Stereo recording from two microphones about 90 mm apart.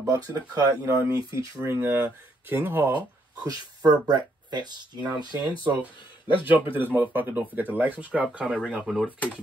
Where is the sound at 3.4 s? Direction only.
45° right (ahead or behind).